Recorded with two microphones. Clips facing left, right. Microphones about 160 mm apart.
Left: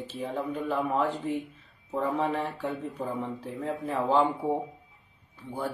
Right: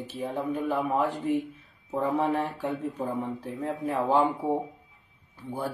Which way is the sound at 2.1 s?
10° right (ahead or behind).